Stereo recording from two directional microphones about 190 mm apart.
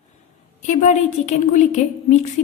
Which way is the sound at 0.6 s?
40° left (ahead or behind).